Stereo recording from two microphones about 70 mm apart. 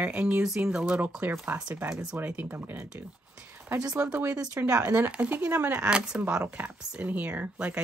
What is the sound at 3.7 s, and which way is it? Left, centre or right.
Speech, centre.